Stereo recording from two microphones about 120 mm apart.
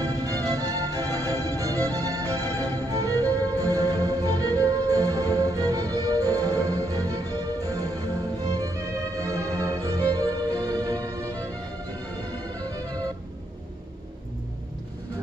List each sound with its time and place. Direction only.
0.0 s music: 30° right (ahead or behind)
2.5 s music: 20° left (ahead or behind)
2.9 s music: 30° right (ahead or behind)
12.5 s music: 30° right (ahead or behind)